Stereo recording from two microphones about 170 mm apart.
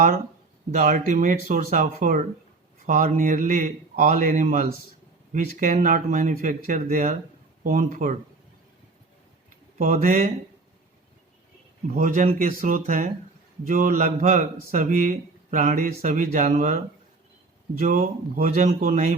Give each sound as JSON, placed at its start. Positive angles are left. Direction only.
{"t": 0.7, "sound": "a man's voice", "side_deg": -50}
{"t": 9.7, "sound": "a man's voice", "side_deg": -50}
{"t": 11.9, "sound": "a man's voice", "side_deg": -50}